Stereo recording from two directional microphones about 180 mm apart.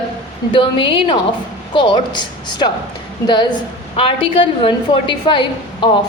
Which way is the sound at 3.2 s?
25° left (ahead or behind).